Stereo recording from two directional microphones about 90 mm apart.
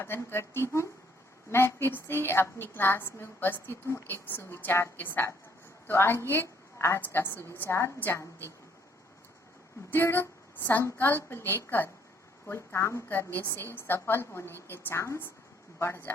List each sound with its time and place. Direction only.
0.0 s a woman's voice: 25° left (ahead or behind)
9.9 s a woman's voice: 25° left (ahead or behind)